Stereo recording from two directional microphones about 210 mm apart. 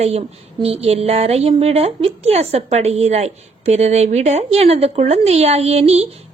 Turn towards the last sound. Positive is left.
turn(degrees=-30)  # may be behind; listen again after turning